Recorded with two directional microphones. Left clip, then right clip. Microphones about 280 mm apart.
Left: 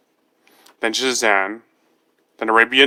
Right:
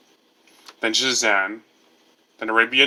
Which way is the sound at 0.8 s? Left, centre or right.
Left.